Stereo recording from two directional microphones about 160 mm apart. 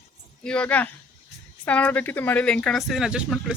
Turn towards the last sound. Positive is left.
turn(degrees=-5)  # may be behind; listen again after turning